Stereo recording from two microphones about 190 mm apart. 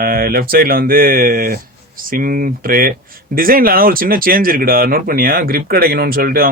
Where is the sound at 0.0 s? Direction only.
50° right (ahead or behind).